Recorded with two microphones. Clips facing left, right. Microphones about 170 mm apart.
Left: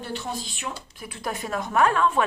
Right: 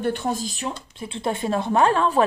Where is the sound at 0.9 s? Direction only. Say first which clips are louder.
Right 6 dB; 25° right (ahead or behind).